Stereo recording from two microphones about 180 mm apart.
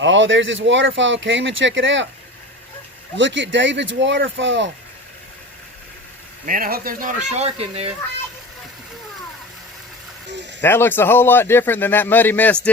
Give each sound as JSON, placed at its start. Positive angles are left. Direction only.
{"t": 0.0, "sound": "speech", "side_deg": -90}
{"t": 3.2, "sound": "speech", "side_deg": -90}
{"t": 6.4, "sound": "speech", "side_deg": -50}
{"t": 10.6, "sound": "a man's voice", "side_deg": 10}